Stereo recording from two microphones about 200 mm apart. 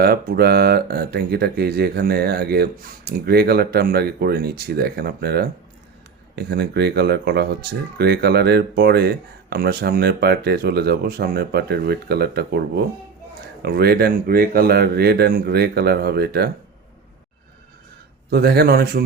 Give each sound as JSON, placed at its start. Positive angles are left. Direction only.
{"t": 0.0, "sound": "speech", "side_deg": -50}
{"t": 18.3, "sound": "speech", "side_deg": -50}